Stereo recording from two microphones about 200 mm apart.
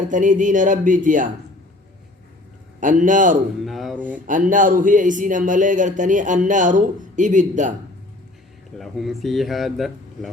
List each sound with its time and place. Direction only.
0.0 s speech: 40° right (ahead or behind)
2.8 s speech: 40° right (ahead or behind)
3.6 s speech: centre (ahead or behind)
4.3 s speech: 40° right (ahead or behind)
8.8 s speech: centre (ahead or behind)